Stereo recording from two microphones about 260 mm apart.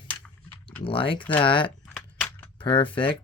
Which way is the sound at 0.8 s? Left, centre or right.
Centre.